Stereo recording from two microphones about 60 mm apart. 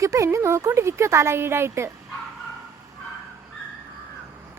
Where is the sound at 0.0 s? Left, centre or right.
Right.